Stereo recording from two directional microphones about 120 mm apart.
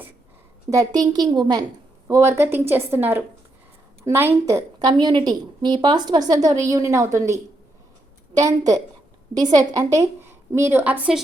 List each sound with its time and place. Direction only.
0.7 s a woman's voice: 30° right (ahead or behind); by 11.2 s 15° right (ahead or behind)